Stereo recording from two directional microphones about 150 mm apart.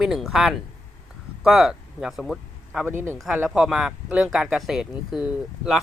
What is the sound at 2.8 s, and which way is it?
Speech, 15° right (ahead or behind).